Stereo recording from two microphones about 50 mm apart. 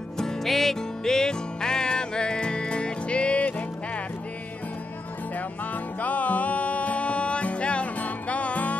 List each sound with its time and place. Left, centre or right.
0.2 s music: centre; by 4.0 s left
5.9 s music: left